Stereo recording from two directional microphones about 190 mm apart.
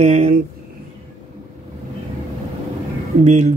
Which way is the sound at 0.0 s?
40° right (ahead or behind).